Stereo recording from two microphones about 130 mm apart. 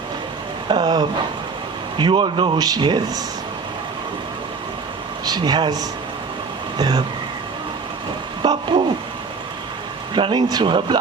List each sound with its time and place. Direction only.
0.7 s speech: 35° right (ahead or behind)
5.2 s speech: 30° right (ahead or behind)
8.4 s a sound: 35° right (ahead or behind)
10.2 s speech: 35° right (ahead or behind)